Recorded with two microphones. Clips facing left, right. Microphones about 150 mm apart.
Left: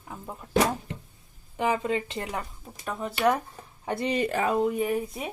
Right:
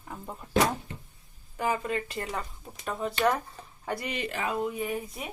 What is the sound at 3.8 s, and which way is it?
Speech, 25° left (ahead or behind).